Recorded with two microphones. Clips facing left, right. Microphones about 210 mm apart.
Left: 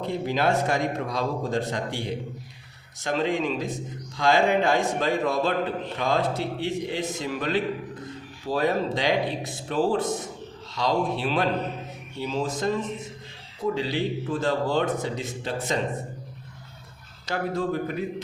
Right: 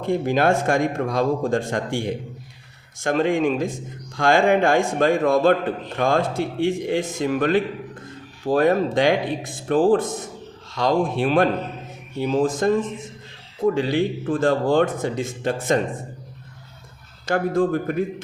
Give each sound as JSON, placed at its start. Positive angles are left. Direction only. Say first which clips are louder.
{"t": 0.0, "sound": "a man's voice", "louder": "right 5 dB", "side_deg": -50}
{"t": 17.2, "sound": "a man's voice", "louder": "right 7 dB", "side_deg": -50}